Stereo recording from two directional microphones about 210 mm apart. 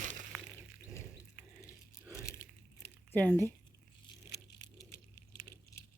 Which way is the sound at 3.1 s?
10° left (ahead or behind).